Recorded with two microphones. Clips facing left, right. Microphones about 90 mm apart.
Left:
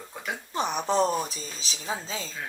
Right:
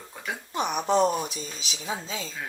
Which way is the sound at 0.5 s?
35° left (ahead or behind).